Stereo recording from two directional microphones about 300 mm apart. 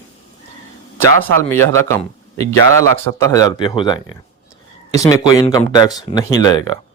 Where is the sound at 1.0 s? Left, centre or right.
Right.